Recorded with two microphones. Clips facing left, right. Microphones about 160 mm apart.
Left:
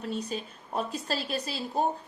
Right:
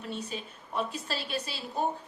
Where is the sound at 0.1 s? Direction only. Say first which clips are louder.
Left 3 dB; 40° left (ahead or behind).